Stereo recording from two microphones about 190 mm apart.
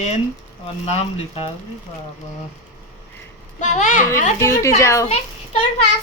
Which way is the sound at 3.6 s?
35° left (ahead or behind).